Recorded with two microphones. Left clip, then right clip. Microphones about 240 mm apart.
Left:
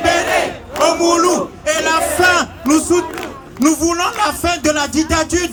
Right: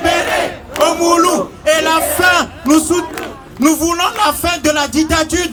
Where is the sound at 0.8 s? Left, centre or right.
Centre.